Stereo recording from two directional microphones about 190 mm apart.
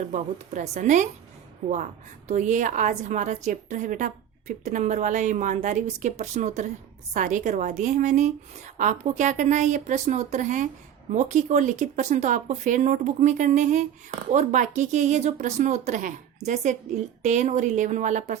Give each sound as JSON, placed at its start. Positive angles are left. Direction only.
{"t": 0.0, "sound": "a woman's voice", "side_deg": -40}
{"t": 2.2, "sound": "a woman's voice", "side_deg": -40}